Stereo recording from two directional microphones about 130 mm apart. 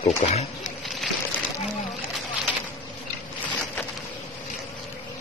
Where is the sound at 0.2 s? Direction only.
50° left (ahead or behind).